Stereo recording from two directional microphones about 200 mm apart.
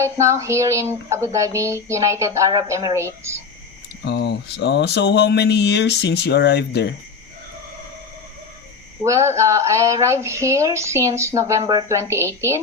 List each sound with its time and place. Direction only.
0.0 s speech: 15° right (ahead or behind)
4.0 s speech: 60° left (ahead or behind)
9.0 s speech: 15° right (ahead or behind)